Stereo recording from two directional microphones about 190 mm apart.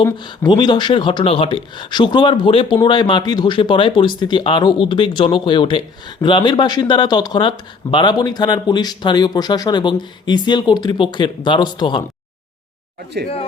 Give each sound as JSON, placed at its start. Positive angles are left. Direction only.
{"t": 0.0, "sound": "speech", "side_deg": 25}